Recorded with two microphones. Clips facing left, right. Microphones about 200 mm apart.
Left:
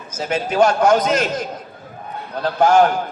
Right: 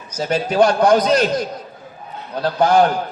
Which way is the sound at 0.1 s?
35° right (ahead or behind).